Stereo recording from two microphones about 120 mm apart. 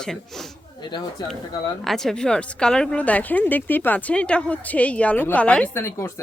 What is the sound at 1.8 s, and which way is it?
Speech, centre (ahead or behind).